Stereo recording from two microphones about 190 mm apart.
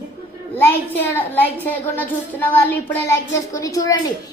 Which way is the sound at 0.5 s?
10° left (ahead or behind).